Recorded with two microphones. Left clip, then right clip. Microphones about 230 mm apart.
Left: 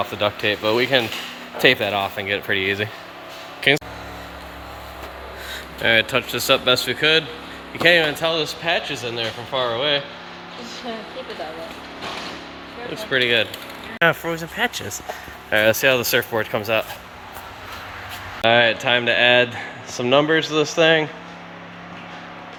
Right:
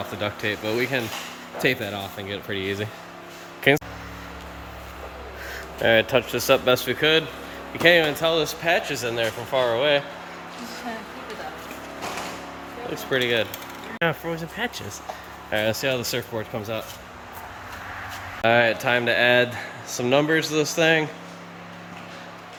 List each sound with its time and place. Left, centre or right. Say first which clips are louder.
0.2 s speech: left 6 dB; centre
5.5 s speech: left 1 dB; centre
13.1 s speech: left 4 dB; centre
18.4 s speech: left 3 dB; centre